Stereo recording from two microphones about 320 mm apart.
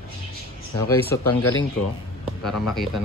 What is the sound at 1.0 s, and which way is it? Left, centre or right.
Speech, centre.